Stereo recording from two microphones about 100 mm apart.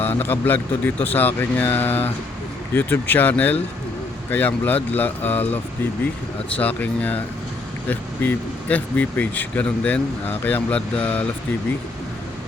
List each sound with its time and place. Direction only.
0.0 s speech: 20° left (ahead or behind)
6.6 s speech: 15° left (ahead or behind)